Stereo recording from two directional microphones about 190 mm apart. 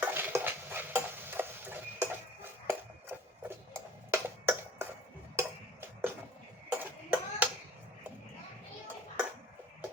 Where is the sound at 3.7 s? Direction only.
10° right (ahead or behind).